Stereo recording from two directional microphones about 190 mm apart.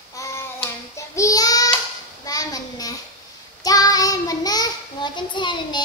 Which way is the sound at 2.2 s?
20° left (ahead or behind).